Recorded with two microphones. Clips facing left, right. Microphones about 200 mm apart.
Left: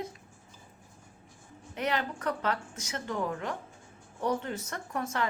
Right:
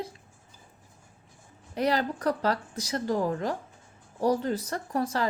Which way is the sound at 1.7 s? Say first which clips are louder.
Right 5 dB; 35° right (ahead or behind).